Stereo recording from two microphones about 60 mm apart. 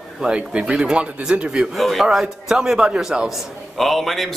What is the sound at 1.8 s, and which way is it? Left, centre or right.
A man's voice, centre.